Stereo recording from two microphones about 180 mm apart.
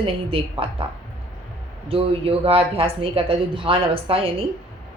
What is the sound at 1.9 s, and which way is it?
Speech, 30° right (ahead or behind).